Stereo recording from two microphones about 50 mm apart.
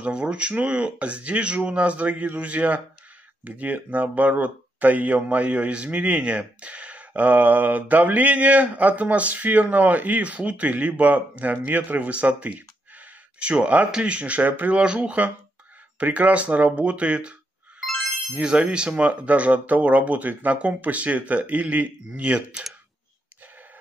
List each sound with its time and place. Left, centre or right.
0.0 s speech: right
17.8 s music: centre
18.3 s speech: centre